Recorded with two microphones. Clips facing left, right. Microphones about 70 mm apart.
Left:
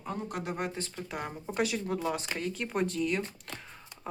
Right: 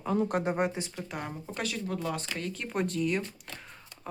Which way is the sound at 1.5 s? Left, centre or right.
Centre.